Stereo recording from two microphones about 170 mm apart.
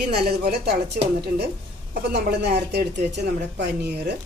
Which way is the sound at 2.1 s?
75° right (ahead or behind).